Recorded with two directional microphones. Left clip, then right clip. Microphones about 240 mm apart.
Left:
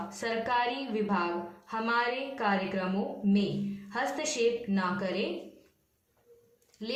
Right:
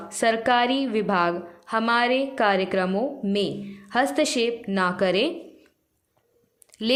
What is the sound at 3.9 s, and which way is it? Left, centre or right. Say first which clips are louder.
A woman's voice: right 10 dB; right.